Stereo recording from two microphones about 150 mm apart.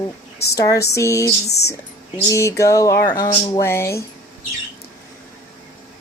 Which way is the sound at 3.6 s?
15° left (ahead or behind).